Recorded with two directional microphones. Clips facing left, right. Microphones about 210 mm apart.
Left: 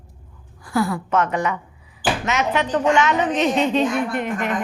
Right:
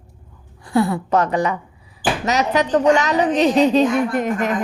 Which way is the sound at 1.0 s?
35° right (ahead or behind).